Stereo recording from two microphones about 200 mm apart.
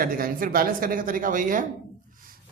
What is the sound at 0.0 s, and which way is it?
Speech, 45° right (ahead or behind).